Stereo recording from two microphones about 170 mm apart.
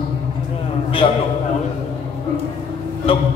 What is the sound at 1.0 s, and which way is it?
Speech, 35° left (ahead or behind).